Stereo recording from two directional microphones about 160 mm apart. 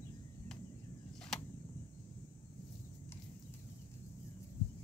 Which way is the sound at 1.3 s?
5° left (ahead or behind).